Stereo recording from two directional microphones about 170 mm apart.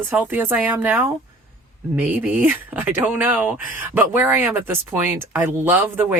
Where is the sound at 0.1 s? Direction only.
10° right (ahead or behind).